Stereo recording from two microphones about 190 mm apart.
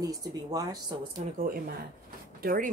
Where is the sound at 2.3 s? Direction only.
50° right (ahead or behind).